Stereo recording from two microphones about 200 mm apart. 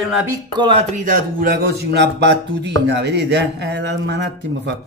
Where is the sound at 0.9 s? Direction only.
45° right (ahead or behind).